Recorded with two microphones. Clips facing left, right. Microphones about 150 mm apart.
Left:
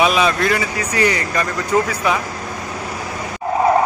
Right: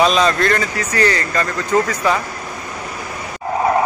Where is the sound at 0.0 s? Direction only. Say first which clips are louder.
Right 1 dB; 5° left (ahead or behind).